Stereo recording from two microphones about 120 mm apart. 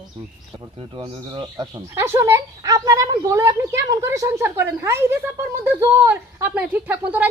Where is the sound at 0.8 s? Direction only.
45° right (ahead or behind).